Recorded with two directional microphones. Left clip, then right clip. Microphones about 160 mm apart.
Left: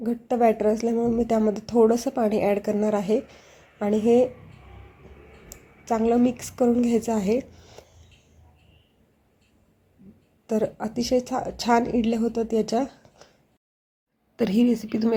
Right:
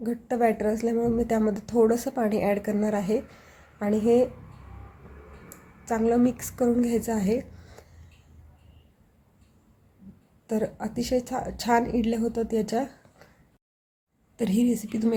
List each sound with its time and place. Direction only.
0.0 s a woman's voice: 15° left (ahead or behind)
5.8 s a woman's voice: 15° left (ahead or behind)
10.4 s a woman's voice: 20° left (ahead or behind)
14.3 s a woman's voice: 15° left (ahead or behind)